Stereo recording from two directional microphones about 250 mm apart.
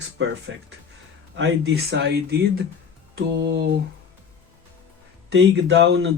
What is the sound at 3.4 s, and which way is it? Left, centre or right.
Speech, right.